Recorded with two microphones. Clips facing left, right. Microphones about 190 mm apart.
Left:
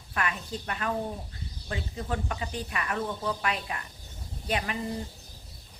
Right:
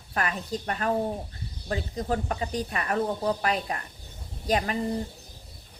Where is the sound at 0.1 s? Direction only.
40° right (ahead or behind).